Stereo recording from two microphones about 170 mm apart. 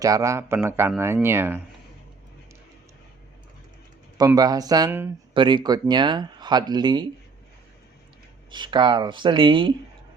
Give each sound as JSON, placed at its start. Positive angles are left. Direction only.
{"t": 0.0, "sound": "speech", "side_deg": -20}
{"t": 4.4, "sound": "speech", "side_deg": -20}
{"t": 5.3, "sound": "speech", "side_deg": -30}
{"t": 8.4, "sound": "speech", "side_deg": -25}